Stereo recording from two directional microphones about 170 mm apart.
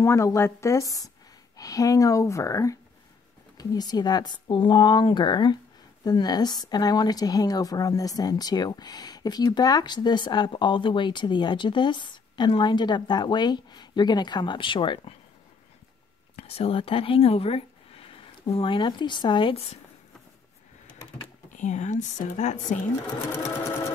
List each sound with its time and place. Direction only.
0.0 s a woman's voice: 15° left (ahead or behind)
16.3 s speech: 35° left (ahead or behind)
21.5 s speech: 45° left (ahead or behind)